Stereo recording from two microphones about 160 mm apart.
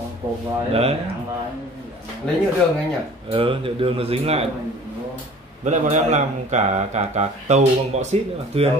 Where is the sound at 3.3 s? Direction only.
35° right (ahead or behind).